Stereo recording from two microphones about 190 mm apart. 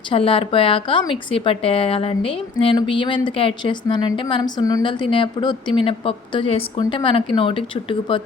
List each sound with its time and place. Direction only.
0.1 s a woman's voice: 30° left (ahead or behind)